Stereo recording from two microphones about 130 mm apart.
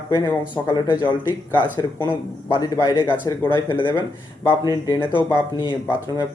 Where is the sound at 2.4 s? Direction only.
30° left (ahead or behind).